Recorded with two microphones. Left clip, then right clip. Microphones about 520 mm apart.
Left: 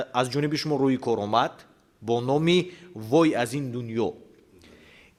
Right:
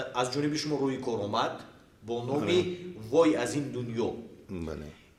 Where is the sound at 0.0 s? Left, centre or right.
Left.